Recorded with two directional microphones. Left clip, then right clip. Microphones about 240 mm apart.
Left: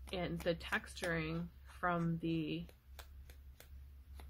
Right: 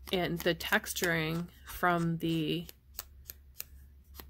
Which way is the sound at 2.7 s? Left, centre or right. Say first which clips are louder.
Right 9 dB; centre.